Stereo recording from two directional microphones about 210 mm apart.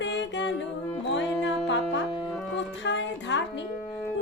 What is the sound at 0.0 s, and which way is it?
Music, 60° left (ahead or behind).